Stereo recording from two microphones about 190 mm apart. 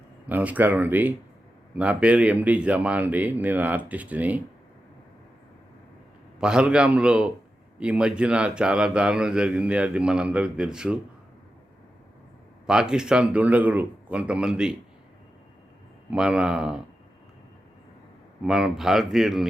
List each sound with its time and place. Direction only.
0.3 s speech: 10° right (ahead or behind)
6.4 s a man's voice: 5° right (ahead or behind)
12.6 s a man's voice: 5° right (ahead or behind)
16.0 s a man's voice: 5° right (ahead or behind)
18.4 s a man's voice: 5° right (ahead or behind)